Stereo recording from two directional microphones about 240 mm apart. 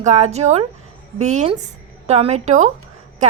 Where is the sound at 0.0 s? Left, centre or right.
Right.